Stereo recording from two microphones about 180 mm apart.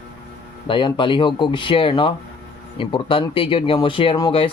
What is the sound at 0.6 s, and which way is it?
Speech, 25° left (ahead or behind).